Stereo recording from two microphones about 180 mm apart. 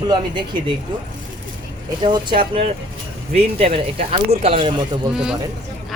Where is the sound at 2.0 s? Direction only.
25° right (ahead or behind).